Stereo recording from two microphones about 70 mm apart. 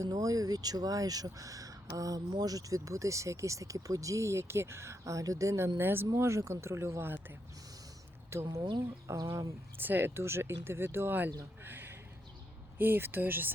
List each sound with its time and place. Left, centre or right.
0.0 s speech: right
6.1 s speech: right
8.3 s speech: right
9.7 s speech: right
11.6 s a sound: right
12.8 s speech: right